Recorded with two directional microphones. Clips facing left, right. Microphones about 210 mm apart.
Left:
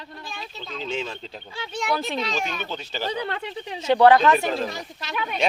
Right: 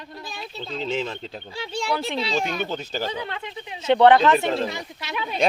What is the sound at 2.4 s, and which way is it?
Speech, 10° right (ahead or behind).